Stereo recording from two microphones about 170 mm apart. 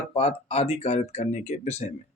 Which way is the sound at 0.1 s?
35° left (ahead or behind).